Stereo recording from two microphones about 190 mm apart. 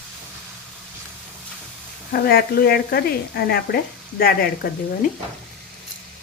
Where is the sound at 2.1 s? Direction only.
55° left (ahead or behind).